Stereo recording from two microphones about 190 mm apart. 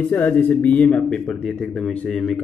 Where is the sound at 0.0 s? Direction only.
10° left (ahead or behind).